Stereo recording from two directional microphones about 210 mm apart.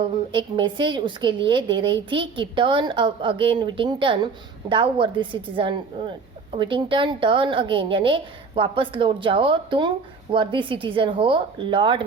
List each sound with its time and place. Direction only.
0.0 s a woman's voice: 25° right (ahead or behind)